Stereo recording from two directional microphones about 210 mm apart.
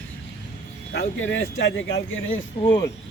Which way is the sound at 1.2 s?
65° left (ahead or behind).